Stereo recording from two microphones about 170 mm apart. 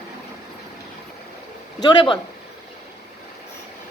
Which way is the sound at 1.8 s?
25° left (ahead or behind).